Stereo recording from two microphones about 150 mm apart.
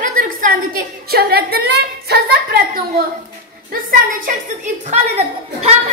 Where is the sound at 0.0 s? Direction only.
65° right (ahead or behind).